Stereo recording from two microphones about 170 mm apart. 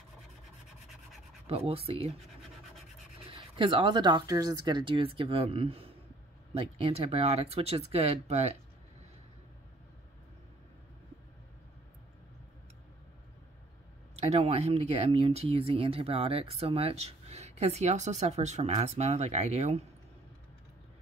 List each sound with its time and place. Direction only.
1.5 s speech: 35° right (ahead or behind)
3.3 s speech: 30° right (ahead or behind)
14.1 s speech: 40° right (ahead or behind)